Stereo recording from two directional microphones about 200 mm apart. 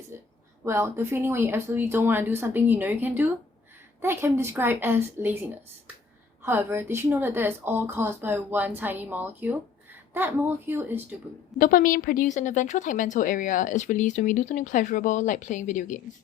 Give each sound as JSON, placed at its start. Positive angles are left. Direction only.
{"t": 0.1, "sound": "a sound", "side_deg": -10}
{"t": 0.6, "sound": "a woman's voice", "side_deg": -15}
{"t": 11.5, "sound": "a woman's voice", "side_deg": 45}